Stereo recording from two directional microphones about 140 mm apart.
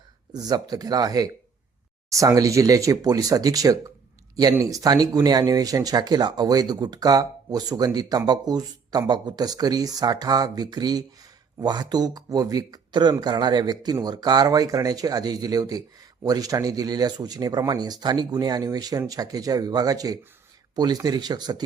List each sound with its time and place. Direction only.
0.3 s speech: 30° right (ahead or behind)